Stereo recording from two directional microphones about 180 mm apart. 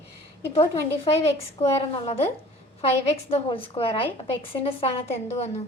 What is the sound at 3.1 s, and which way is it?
A woman's voice, 30° left (ahead or behind).